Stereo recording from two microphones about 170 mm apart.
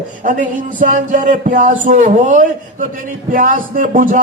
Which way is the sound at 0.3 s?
50° right (ahead or behind).